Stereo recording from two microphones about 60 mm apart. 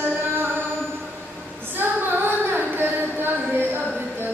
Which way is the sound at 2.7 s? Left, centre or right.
Right.